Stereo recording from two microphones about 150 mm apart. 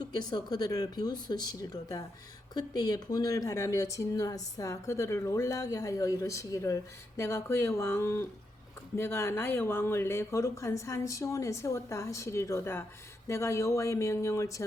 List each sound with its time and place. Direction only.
0.0 s speech: 25° left (ahead or behind)